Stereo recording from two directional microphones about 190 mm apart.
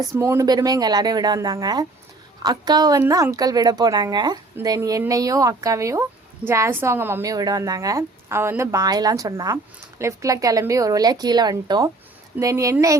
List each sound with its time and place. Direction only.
0.0 s speech: 15° right (ahead or behind)